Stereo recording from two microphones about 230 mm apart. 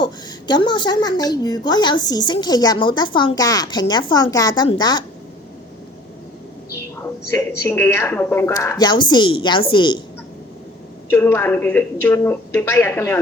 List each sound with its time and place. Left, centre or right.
0.0 s a woman's voice: centre
7.6 s a woman's voice: centre
11.1 s a woman's voice: centre